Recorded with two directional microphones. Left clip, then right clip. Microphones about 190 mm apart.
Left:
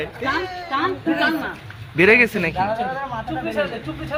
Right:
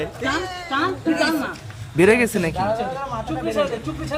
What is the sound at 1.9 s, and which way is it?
Speech, 30° right (ahead or behind).